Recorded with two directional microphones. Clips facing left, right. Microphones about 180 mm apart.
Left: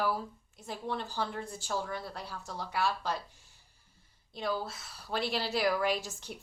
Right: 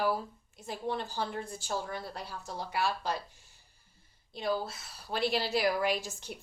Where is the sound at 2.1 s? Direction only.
15° right (ahead or behind).